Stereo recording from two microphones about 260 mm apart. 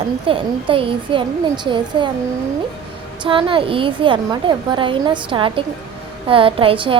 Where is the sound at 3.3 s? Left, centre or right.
Centre.